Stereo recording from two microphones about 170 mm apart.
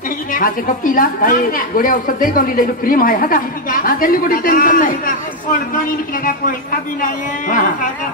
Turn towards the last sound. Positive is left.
turn(degrees=50)  # may be behind; listen again after turning